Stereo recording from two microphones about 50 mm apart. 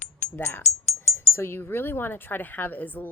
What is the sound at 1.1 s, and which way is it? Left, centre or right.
Speech, left.